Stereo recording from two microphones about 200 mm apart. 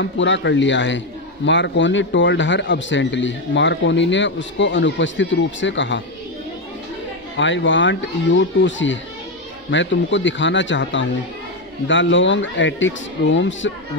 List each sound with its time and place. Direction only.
0.0 s a man's voice: 65° left (ahead or behind)
7.3 s speech: 65° left (ahead or behind)